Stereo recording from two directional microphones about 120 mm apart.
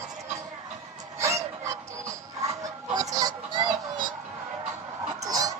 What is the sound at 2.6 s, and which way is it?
Fowl, 30° right (ahead or behind).